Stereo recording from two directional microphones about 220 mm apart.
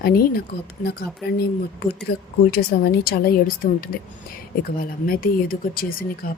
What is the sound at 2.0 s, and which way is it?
Speech, 45° left (ahead or behind).